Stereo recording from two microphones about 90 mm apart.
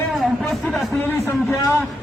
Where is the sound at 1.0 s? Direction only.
25° left (ahead or behind).